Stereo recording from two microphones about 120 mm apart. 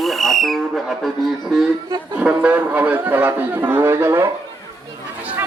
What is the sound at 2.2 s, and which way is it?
A man's voice, 10° right (ahead or behind).